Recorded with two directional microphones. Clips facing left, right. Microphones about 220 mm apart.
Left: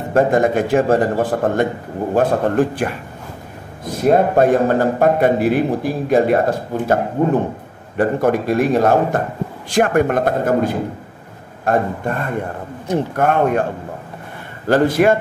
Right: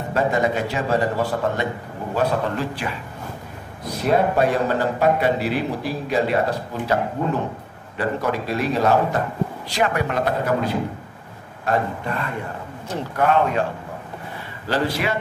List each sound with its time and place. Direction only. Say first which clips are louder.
0.1 s a man's voice: left 6 dB; 50° left (ahead or behind)
14.7 s a man's voice: left 9 dB; 50° left (ahead or behind)